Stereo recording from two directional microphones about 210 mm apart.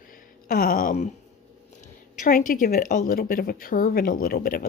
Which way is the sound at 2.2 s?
40° left (ahead or behind).